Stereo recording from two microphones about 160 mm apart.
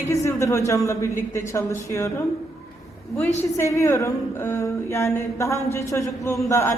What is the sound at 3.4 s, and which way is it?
A woman's voice, 15° left (ahead or behind).